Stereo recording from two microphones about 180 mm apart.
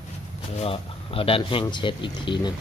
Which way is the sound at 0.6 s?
30° left (ahead or behind).